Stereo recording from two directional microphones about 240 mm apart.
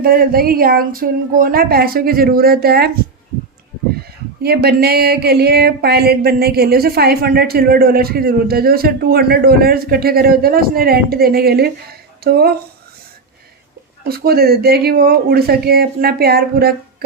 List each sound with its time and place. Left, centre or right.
0.0 s speech: right
4.4 s speech: right
14.0 s speech: right